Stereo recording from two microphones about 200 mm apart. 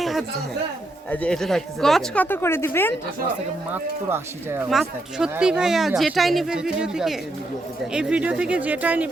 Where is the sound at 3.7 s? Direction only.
10° right (ahead or behind).